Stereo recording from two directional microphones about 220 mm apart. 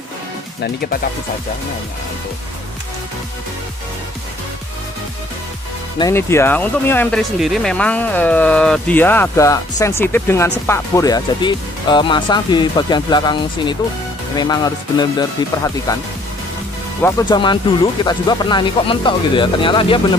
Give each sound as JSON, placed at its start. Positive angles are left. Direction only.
{"t": 0.6, "sound": "speech", "side_deg": 45}
{"t": 5.9, "sound": "speech", "side_deg": 15}
{"t": 17.2, "sound": "speech", "side_deg": 20}